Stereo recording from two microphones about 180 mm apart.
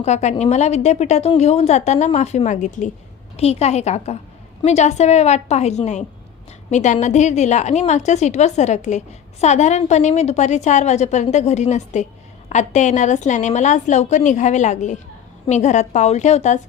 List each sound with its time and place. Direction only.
0.0 s a woman's voice: 40° left (ahead or behind)